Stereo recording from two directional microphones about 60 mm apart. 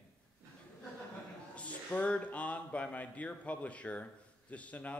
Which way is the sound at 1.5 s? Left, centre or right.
Left.